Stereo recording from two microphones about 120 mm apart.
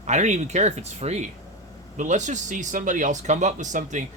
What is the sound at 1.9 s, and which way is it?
Speech, 90° right.